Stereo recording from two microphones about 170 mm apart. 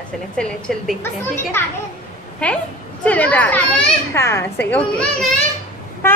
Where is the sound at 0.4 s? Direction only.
5° left (ahead or behind).